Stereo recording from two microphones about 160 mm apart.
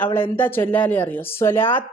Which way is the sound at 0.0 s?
10° left (ahead or behind).